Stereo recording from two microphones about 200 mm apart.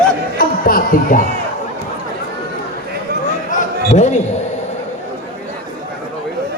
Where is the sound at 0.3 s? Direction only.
45° left (ahead or behind).